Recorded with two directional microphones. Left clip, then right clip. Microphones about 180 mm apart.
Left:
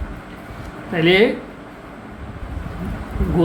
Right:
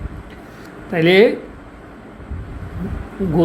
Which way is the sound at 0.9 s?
40° right (ahead or behind).